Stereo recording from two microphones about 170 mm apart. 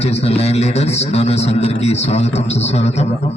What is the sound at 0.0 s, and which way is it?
A man's voice, 40° left (ahead or behind).